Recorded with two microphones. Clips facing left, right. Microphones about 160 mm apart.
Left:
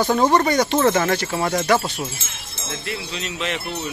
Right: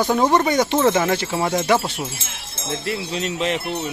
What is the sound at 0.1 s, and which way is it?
Speech, 10° right (ahead or behind).